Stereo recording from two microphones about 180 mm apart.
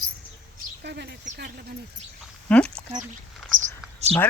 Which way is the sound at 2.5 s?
5° left (ahead or behind).